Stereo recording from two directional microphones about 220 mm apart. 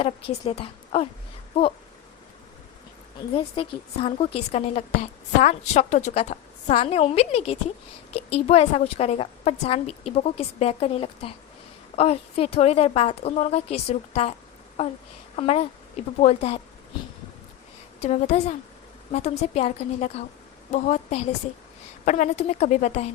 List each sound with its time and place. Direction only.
0.0 s a woman's voice: 25° left (ahead or behind)
3.3 s a woman's voice: 25° left (ahead or behind)
15.4 s a woman's voice: 25° left (ahead or behind)
18.0 s a woman's voice: 30° left (ahead or behind)